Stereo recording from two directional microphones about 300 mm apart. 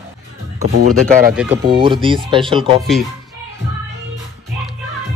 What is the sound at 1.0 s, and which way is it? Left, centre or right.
Speech, right.